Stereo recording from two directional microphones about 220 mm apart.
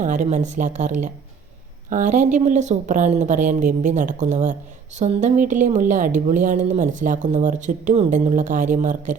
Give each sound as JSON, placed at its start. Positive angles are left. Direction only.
{"t": 0.0, "sound": "speech", "side_deg": -35}